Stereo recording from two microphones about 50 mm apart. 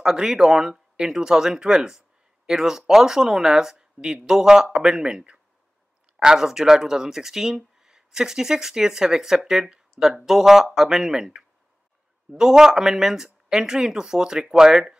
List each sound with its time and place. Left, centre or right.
0.0 s speech: centre